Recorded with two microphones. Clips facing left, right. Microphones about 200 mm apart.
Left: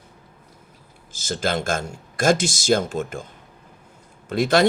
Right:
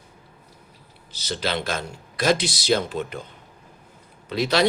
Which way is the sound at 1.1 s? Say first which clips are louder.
Left 3 dB; 50° left (ahead or behind).